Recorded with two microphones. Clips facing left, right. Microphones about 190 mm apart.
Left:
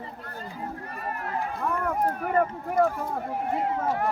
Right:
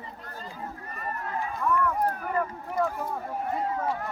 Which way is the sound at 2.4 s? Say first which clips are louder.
Left 7 dB; 50° left (ahead or behind).